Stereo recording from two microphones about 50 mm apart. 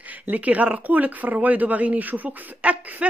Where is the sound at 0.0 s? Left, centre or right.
Right.